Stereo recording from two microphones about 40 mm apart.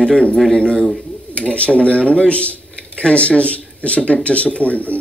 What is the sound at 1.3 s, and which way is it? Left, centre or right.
Speech, left.